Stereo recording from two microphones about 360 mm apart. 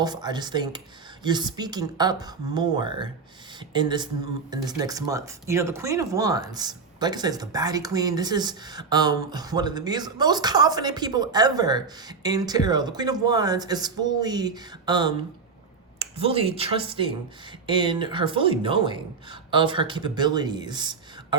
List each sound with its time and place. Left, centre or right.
0.0 s speech: centre